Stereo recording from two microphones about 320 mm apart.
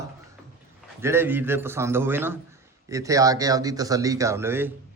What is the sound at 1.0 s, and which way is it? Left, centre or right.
A man's voice, centre.